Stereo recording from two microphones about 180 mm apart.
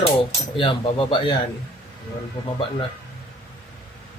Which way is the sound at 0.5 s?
30° left (ahead or behind).